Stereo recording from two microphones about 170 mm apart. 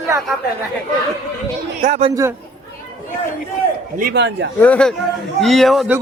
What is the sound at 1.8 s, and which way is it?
Speech, 40° right (ahead or behind).